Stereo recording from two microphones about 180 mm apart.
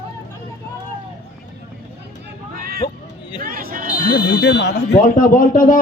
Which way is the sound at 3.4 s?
50° right (ahead or behind).